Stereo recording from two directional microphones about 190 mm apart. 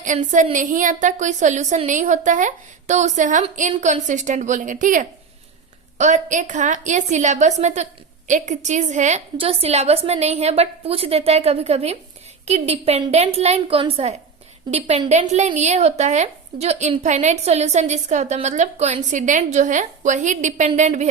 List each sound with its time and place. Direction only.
0.0 s speech: 40° right (ahead or behind)